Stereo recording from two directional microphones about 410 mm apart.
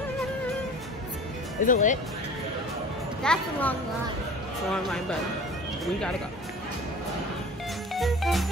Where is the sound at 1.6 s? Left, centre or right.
Centre.